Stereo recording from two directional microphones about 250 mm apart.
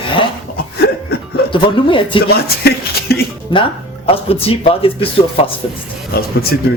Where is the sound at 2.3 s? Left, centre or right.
Left.